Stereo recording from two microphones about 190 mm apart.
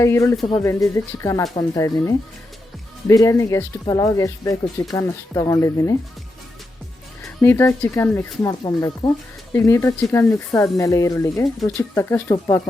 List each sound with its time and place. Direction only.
0.0 s speech: 15° left (ahead or behind)
7.4 s speech: 15° left (ahead or behind)